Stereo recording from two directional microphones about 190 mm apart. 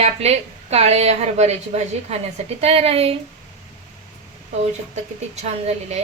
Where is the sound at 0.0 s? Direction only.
35° right (ahead or behind).